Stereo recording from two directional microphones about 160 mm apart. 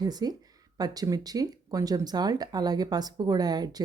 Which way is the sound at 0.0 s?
25° right (ahead or behind).